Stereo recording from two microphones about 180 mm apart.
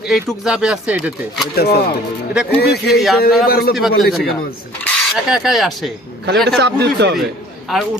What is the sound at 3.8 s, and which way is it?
Speech, centre (ahead or behind).